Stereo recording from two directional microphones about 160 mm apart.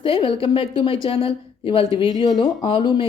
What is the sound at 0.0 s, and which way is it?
Speech, 35° left (ahead or behind).